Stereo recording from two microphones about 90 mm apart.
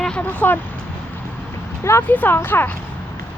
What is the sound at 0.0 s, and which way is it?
Speech, 15° left (ahead or behind).